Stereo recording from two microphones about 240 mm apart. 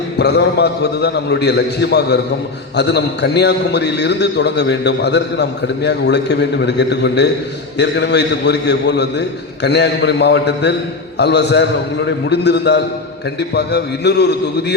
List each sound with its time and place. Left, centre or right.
0.2 s a man's voice: left